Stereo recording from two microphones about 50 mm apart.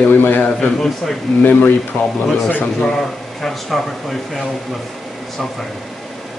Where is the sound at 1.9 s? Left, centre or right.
Left.